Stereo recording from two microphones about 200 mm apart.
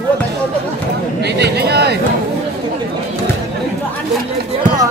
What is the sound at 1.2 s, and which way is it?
Speech, 55° right (ahead or behind).